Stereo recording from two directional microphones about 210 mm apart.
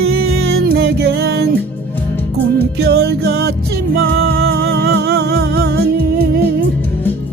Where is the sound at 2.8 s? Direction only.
50° right (ahead or behind).